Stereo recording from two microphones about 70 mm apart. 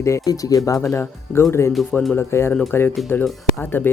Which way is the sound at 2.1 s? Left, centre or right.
Left.